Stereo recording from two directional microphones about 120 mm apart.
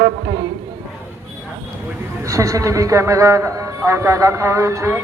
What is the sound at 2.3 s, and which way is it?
A man's voice, 25° right (ahead or behind).